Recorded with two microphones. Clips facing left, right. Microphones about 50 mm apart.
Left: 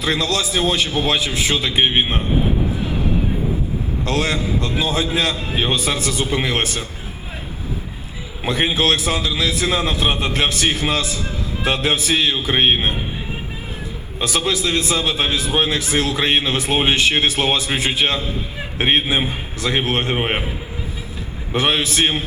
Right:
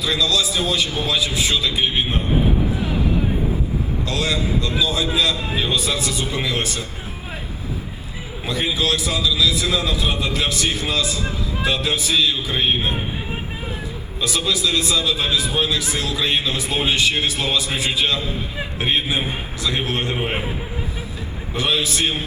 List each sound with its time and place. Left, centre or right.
0.0 s a man's voice: left
4.0 s a man's voice: left
8.4 s a man's voice: left
14.2 s a man's voice: left
21.5 s a man's voice: left